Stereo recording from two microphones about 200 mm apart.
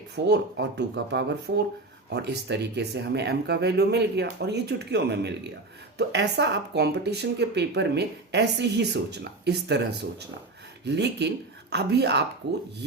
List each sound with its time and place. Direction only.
0.3 s speech: 55° right (ahead or behind)